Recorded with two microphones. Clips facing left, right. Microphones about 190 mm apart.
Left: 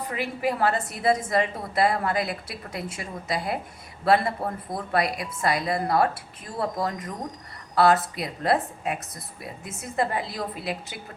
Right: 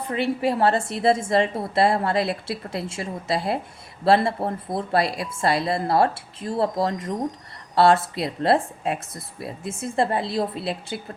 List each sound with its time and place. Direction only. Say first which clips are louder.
0.0 s a woman's voice: right 4 dB; 30° right (ahead or behind)